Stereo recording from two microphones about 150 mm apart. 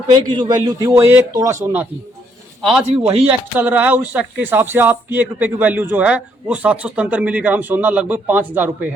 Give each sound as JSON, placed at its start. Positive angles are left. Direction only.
{"t": 0.3, "sound": "a man's voice", "side_deg": -30}
{"t": 2.6, "sound": "a man's voice", "side_deg": 0}
{"t": 2.9, "sound": "speech", "side_deg": -40}
{"t": 3.6, "sound": "speech", "side_deg": -10}